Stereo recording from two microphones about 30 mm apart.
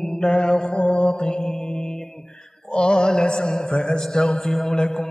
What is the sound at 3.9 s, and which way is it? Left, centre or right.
Mantra, left.